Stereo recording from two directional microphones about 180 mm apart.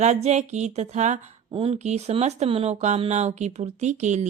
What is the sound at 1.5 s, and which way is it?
Speech, 30° right (ahead or behind).